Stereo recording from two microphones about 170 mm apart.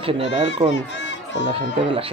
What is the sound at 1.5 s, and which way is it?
Speech, 35° right (ahead or behind).